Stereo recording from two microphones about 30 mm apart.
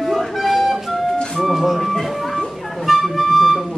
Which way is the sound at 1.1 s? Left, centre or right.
Left.